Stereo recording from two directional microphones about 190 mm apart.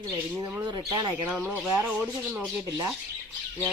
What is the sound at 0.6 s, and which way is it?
Speech, 25° right (ahead or behind).